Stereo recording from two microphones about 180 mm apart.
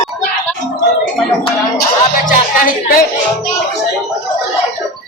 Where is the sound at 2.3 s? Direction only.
50° left (ahead or behind).